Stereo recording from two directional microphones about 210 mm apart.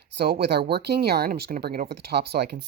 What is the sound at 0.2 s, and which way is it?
Speech, 50° right (ahead or behind).